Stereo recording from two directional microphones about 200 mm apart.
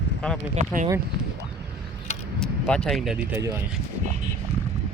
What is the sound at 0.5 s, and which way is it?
Speech, 40° right (ahead or behind).